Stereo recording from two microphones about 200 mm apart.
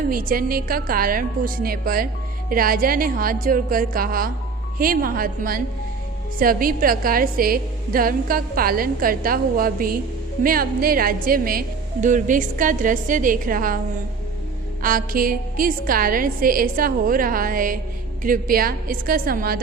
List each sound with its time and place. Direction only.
0.1 s a woman's voice: 45° right (ahead or behind)
14.8 s a woman's voice: 45° right (ahead or behind)